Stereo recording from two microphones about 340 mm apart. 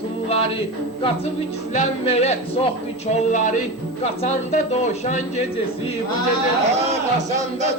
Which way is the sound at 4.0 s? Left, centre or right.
Centre.